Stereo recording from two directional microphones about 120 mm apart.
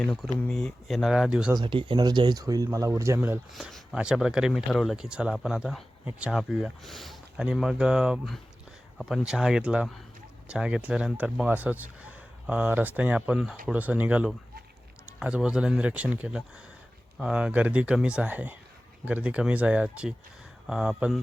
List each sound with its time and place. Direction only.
0.0 s speech: 5° left (ahead or behind)
1.5 s a man's voice: 40° right (ahead or behind); by 3.2 s 25° right (ahead or behind)
3.5 s speech: centre (ahead or behind)